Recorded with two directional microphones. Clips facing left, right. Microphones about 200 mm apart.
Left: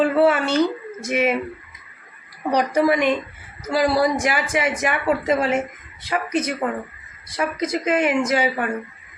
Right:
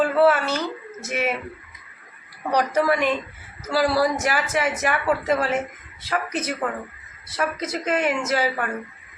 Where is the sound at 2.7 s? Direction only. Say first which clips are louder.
Left 5 dB; 15° left (ahead or behind).